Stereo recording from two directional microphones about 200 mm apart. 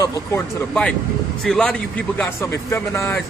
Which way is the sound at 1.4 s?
5° left (ahead or behind).